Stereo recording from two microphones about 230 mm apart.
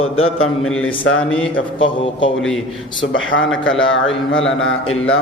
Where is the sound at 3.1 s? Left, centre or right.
Left.